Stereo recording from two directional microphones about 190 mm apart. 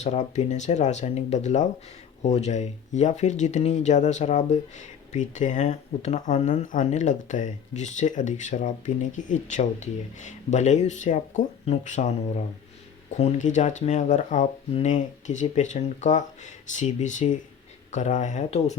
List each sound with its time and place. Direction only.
0.0 s speech: 35° left (ahead or behind)
13.1 s speech: 35° left (ahead or behind)